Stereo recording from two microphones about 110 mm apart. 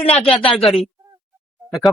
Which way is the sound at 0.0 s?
70° left (ahead or behind).